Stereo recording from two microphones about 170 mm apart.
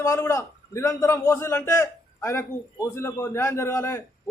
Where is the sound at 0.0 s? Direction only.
15° left (ahead or behind).